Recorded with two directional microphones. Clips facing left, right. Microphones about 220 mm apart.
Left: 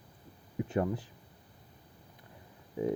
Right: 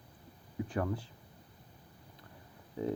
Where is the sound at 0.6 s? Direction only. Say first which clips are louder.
Left 3 dB; 25° left (ahead or behind).